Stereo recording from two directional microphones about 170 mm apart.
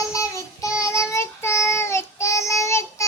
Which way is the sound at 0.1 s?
20° left (ahead or behind).